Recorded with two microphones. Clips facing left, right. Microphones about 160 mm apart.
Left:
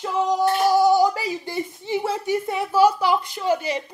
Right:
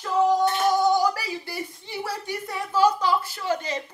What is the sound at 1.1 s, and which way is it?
Speech, 20° left (ahead or behind).